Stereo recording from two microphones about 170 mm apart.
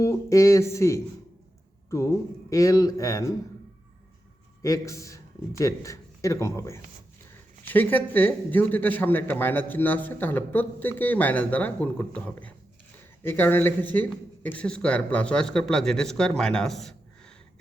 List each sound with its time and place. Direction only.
0.0 s a man's voice: 15° left (ahead or behind)
4.6 s a man's voice: 20° left (ahead or behind)
16.4 s a sound: 5° left (ahead or behind)